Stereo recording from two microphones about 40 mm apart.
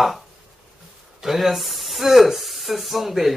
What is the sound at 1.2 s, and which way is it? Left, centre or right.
Speech, centre.